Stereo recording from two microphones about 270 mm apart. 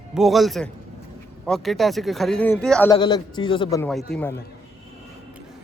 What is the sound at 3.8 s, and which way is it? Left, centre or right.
Speech, centre.